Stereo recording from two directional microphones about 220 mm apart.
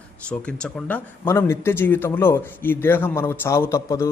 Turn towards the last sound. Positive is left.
turn(degrees=15)  # may be behind; listen again after turning